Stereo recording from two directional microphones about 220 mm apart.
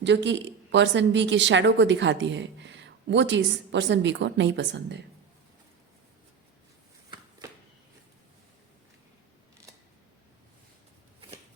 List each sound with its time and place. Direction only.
0.0 s a woman's voice: 55° right (ahead or behind)